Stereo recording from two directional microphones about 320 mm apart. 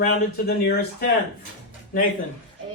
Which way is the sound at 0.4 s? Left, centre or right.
Left.